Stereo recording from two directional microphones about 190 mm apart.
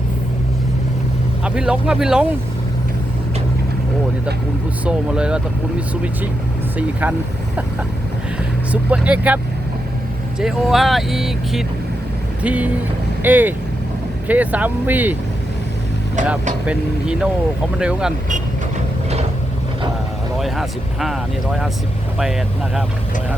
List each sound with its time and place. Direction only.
1.5 s speech: 5° right (ahead or behind)
4.9 s speech: 5° right (ahead or behind)
8.7 s speech: 5° right (ahead or behind)
10.4 s speech: centre (ahead or behind)
16.6 s speech: 5° right (ahead or behind)
20.4 s speech: centre (ahead or behind)